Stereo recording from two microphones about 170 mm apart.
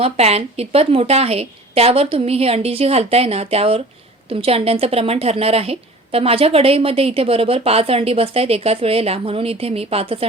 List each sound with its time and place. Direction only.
0.0 s a woman's voice: 40° right (ahead or behind)